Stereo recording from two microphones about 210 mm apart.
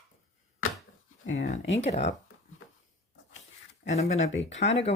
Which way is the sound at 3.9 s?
30° left (ahead or behind).